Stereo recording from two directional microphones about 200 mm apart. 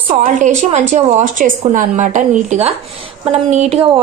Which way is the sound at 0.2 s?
35° right (ahead or behind).